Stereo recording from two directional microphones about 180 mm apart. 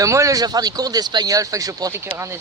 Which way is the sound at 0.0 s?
15° right (ahead or behind).